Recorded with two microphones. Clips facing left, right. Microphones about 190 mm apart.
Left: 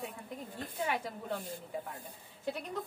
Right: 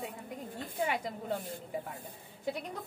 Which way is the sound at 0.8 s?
15° right (ahead or behind).